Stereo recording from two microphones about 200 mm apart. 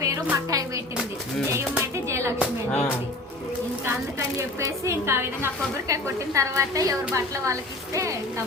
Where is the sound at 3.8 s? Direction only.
15° right (ahead or behind).